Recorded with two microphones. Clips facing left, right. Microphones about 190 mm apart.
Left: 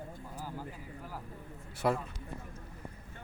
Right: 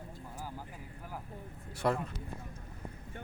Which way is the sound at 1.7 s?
Centre (ahead or behind).